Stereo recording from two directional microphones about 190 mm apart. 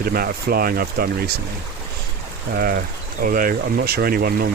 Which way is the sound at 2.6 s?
50° right (ahead or behind).